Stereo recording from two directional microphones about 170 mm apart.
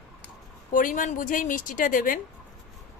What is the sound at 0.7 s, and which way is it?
Speech, 50° left (ahead or behind).